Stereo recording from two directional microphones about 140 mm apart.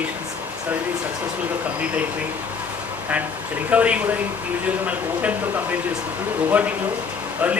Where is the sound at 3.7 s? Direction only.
10° right (ahead or behind).